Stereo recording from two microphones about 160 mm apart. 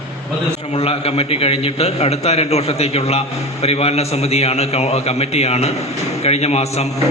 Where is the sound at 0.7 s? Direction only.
40° left (ahead or behind).